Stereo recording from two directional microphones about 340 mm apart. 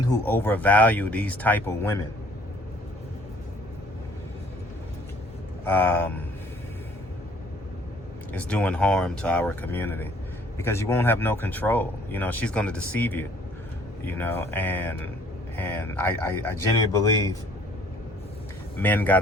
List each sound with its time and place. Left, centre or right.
0.3 s speech: centre
5.6 s speech: centre
8.3 s speech: centre
18.8 s speech: centre